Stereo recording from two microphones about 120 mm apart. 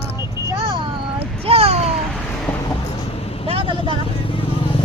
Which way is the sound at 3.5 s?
45° right (ahead or behind).